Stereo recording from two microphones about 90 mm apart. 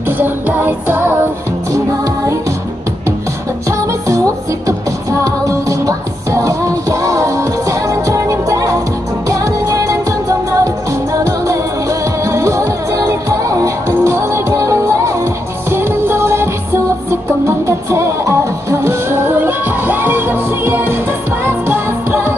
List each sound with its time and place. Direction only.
0.2 s music: 20° right (ahead or behind)
5.2 s music: 35° right (ahead or behind)